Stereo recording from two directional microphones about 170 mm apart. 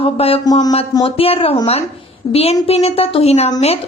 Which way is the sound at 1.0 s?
35° left (ahead or behind).